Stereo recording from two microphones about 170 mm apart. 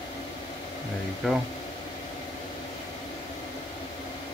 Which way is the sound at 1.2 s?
Centre (ahead or behind).